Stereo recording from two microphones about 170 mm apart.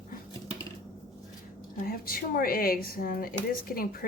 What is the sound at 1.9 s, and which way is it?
Speech, 60° left (ahead or behind).